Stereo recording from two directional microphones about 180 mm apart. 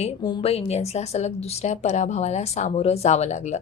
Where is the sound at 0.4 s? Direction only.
35° left (ahead or behind).